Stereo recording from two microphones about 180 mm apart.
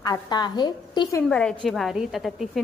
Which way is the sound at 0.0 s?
20° left (ahead or behind).